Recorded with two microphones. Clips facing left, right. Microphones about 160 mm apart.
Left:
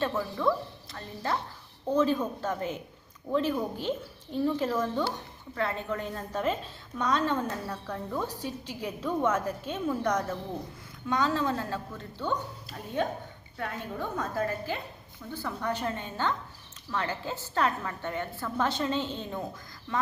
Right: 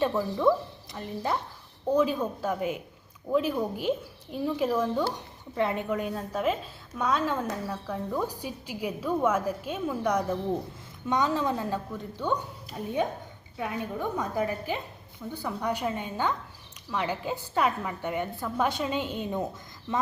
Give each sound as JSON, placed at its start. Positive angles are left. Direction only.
{"t": 0.0, "sound": "a woman's voice", "side_deg": -15}
{"t": 13.6, "sound": "a woman's voice", "side_deg": -15}